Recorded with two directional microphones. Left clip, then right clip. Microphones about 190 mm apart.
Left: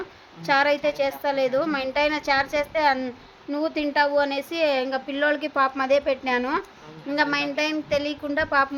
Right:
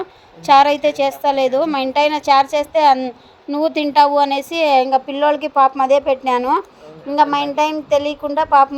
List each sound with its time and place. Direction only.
0.4 s a woman's voice: 30° right (ahead or behind)